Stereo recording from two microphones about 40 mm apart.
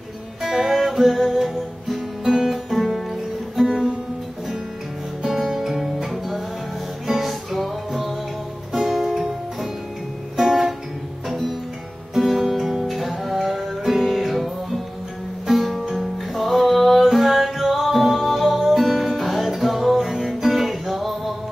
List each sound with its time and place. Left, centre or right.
0.4 s music: centre
3.6 s music: centre
5.2 s music: centre
11.2 s music: centre